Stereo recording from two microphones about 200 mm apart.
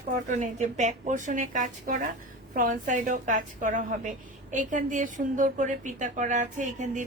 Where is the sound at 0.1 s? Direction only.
40° right (ahead or behind).